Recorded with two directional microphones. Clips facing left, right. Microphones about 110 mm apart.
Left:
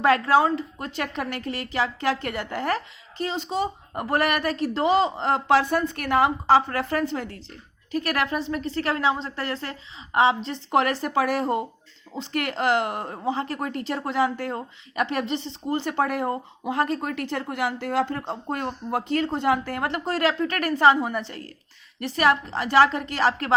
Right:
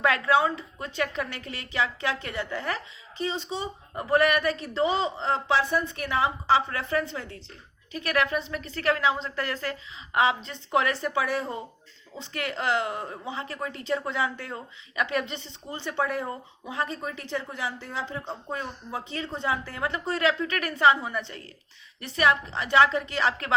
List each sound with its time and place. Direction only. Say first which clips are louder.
0.0 s a woman's voice: left 4 dB; 40° left (ahead or behind)
10.7 s speech: left 3 dB; 45° left (ahead or behind)
15.9 s speech: left 2 dB; 55° left (ahead or behind)
17.0 s speech: left 4 dB; 75° left (ahead or behind); by 18.3 s 55° left (ahead or behind)
18.5 s a woman's voice: left 7 dB; 65° left (ahead or behind); by 23.6 s 40° left (ahead or behind)